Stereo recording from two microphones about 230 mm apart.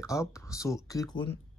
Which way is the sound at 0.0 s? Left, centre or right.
Centre.